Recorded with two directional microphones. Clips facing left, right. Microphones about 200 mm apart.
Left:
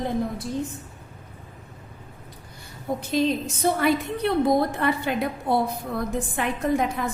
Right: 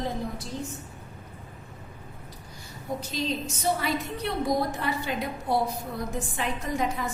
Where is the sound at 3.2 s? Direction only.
55° left (ahead or behind).